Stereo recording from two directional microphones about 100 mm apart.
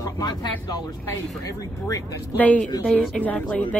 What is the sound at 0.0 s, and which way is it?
Speech, 45° left (ahead or behind).